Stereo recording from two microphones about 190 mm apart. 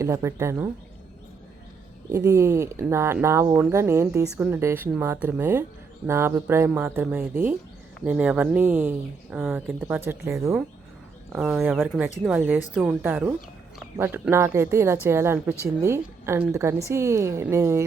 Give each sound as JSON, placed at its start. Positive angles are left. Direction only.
{"t": 0.0, "sound": "speech", "side_deg": -15}
{"t": 2.0, "sound": "speech", "side_deg": -15}